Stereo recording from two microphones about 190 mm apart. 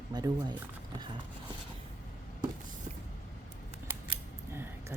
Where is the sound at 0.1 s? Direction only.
20° right (ahead or behind).